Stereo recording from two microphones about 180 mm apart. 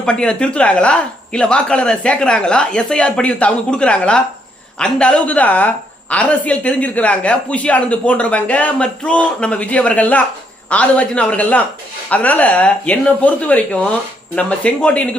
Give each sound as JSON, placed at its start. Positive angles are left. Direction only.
{"t": 0.0, "sound": "a woman's voice", "side_deg": 5}